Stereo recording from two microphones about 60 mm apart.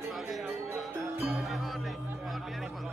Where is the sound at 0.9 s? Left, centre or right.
Right.